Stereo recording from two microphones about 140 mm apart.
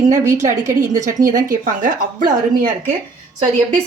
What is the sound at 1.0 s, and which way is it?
Speech, 65° right (ahead or behind).